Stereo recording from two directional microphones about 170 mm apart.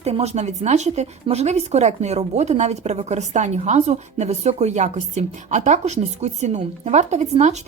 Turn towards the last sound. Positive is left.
turn(degrees=-40)  # may be behind; listen again after turning